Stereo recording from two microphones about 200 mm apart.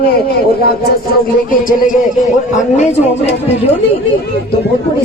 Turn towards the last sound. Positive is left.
turn(degrees=35)  # may be behind; listen again after turning